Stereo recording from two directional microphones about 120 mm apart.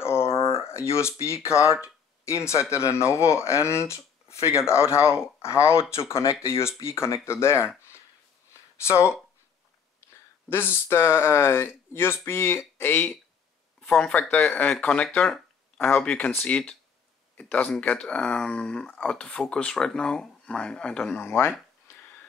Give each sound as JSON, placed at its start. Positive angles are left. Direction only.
{"t": 0.0, "sound": "a sound", "side_deg": 20}
{"t": 1.2, "sound": "speech", "side_deg": 25}
{"t": 8.8, "sound": "speech", "side_deg": 25}
{"t": 10.5, "sound": "speech", "side_deg": 20}
{"t": 13.7, "sound": "speech", "side_deg": 5}
{"t": 21.2, "sound": "speech", "side_deg": 20}